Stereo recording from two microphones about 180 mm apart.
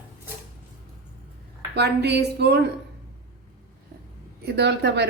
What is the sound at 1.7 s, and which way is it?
Speech, 65° right (ahead or behind).